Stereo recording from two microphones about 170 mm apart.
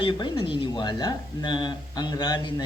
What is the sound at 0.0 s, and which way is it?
Speech, 25° left (ahead or behind).